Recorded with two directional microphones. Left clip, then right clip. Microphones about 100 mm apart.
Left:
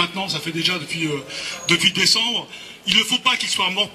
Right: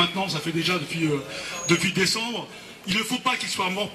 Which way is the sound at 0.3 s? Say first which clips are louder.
Left 4 dB; 50° left (ahead or behind).